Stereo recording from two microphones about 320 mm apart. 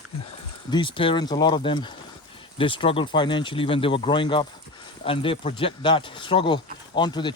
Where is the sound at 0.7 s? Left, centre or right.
Centre.